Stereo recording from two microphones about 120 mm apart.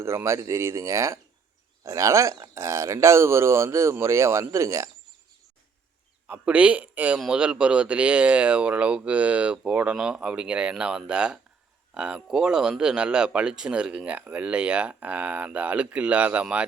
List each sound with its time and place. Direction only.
0.0 s speech: 20° right (ahead or behind)
6.2 s speech: 15° right (ahead or behind)